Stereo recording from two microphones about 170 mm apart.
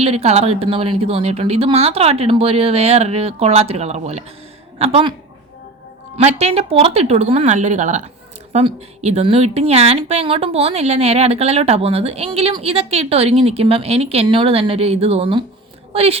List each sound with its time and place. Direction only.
0.0 s a woman's voice: 35° right (ahead or behind)
6.1 s a woman's voice: 40° right (ahead or behind)